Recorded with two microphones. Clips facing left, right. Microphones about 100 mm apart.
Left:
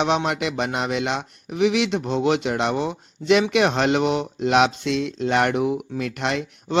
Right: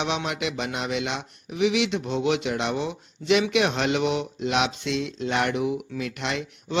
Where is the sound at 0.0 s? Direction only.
40° left (ahead or behind).